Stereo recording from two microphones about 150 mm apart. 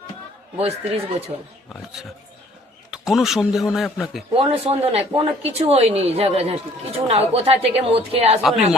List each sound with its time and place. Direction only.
0.6 s a woman's voice: 40° right (ahead or behind)
1.7 s a man's voice: 5° right (ahead or behind)
4.3 s a woman's voice: 40° right (ahead or behind)
8.4 s a man's voice: centre (ahead or behind)